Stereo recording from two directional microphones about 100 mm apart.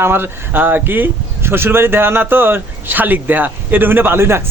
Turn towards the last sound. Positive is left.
turn(degrees=-25)  # may be behind; listen again after turning